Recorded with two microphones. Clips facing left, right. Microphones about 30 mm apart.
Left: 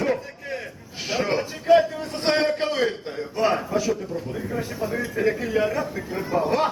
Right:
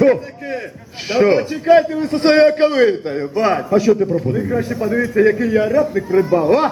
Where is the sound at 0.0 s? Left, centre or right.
Right.